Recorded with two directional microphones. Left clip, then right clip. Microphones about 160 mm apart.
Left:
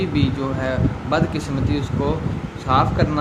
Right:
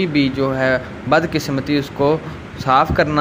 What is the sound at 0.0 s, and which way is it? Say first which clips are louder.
Speech: right 5 dB; 35° right (ahead or behind).